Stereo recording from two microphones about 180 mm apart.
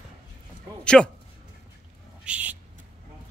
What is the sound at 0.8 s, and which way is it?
Speech, 5° left (ahead or behind).